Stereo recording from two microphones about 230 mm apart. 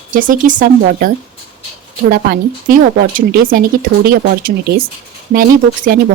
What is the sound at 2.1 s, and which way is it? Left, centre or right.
Speech, right.